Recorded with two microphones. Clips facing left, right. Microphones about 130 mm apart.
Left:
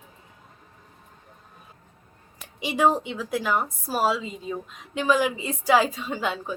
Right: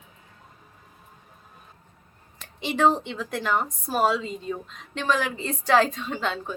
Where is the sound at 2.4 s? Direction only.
10° left (ahead or behind).